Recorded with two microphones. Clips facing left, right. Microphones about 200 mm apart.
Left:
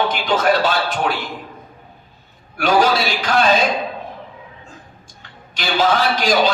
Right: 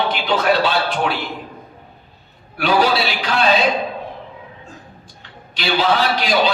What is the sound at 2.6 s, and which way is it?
A man's voice, 45° left (ahead or behind).